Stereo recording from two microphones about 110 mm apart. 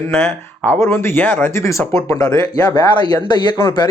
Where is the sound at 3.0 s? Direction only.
40° left (ahead or behind).